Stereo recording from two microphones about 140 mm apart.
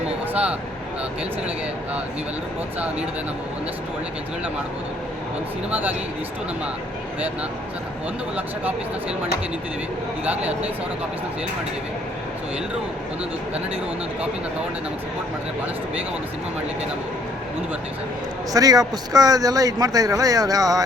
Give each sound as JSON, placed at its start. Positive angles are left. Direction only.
{"t": 8.4, "sound": "speech", "side_deg": -10}
{"t": 10.2, "sound": "speech", "side_deg": -10}
{"t": 18.5, "sound": "speech", "side_deg": -25}